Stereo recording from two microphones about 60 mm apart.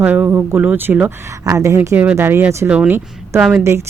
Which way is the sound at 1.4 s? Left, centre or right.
Right.